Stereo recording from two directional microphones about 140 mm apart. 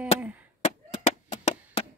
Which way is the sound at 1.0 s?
50° left (ahead or behind).